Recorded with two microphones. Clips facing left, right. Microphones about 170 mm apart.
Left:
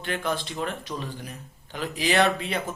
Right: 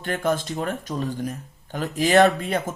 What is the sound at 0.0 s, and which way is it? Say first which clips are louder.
Speech: right 5 dB; 45° right (ahead or behind).